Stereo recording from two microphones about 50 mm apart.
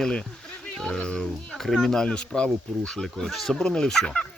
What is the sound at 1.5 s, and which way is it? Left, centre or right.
Speech, centre.